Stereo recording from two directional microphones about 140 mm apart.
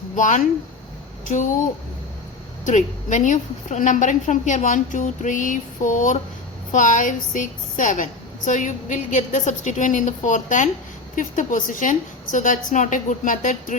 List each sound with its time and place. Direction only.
0.2 s a woman's voice: 65° left (ahead or behind)
2.6 s a woman's voice: 60° left (ahead or behind)